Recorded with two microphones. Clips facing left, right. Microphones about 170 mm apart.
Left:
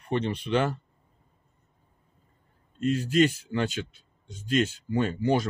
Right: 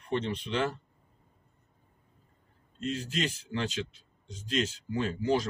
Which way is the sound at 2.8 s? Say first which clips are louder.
Left 10 dB; 55° left (ahead or behind).